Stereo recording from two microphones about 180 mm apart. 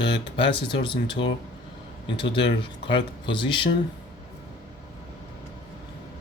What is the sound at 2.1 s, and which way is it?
Speech, 30° left (ahead or behind).